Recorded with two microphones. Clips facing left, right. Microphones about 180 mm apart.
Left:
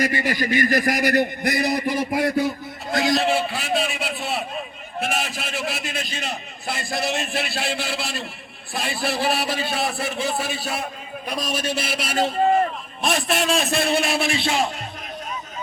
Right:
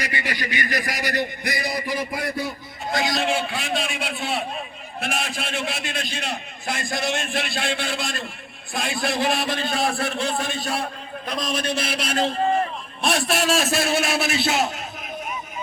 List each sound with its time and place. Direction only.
0.0 s a man's voice: 45° left (ahead or behind)
3.0 s a man's voice: centre (ahead or behind)